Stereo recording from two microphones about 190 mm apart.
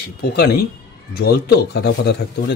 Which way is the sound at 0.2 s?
60° left (ahead or behind).